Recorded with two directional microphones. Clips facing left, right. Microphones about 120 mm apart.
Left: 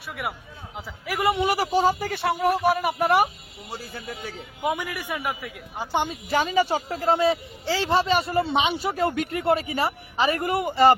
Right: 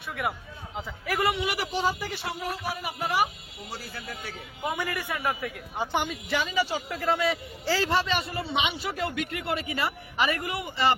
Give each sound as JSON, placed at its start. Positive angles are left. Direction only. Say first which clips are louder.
{"t": 0.8, "sound": "a man's voice", "louder": "even", "side_deg": 5}
{"t": 1.5, "sound": "speech", "louder": "left 7 dB", "side_deg": 40}
{"t": 4.6, "sound": "a man's voice", "louder": "left 3 dB", "side_deg": 15}
{"t": 5.9, "sound": "speech", "louder": "left 4 dB", "side_deg": 25}
{"t": 6.3, "sound": "a woman's voice", "louder": "left 6 dB", "side_deg": 45}